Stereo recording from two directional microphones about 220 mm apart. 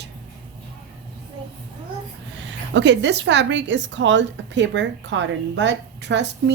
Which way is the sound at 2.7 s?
55° right (ahead or behind).